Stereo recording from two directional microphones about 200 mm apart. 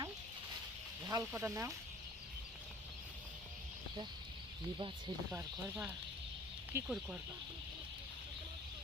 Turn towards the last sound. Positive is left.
turn(degrees=-15)  # may be behind; listen again after turning